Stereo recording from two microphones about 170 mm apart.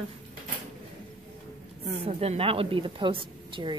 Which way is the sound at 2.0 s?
35° right (ahead or behind).